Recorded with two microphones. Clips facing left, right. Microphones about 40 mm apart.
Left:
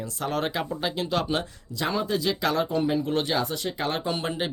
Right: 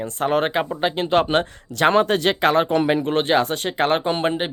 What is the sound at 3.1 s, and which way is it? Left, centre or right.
Speech, right.